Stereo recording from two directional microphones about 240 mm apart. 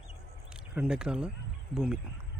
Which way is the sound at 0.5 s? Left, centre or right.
Centre.